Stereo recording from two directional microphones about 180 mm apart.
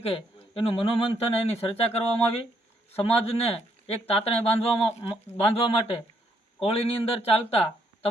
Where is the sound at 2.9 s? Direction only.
35° left (ahead or behind).